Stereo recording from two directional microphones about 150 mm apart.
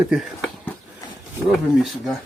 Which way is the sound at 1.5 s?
Centre (ahead or behind).